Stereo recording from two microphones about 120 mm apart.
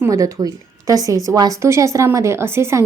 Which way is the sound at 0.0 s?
30° right (ahead or behind).